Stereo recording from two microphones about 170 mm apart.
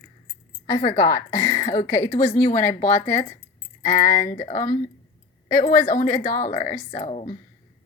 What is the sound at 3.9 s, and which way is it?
Speech, 45° left (ahead or behind).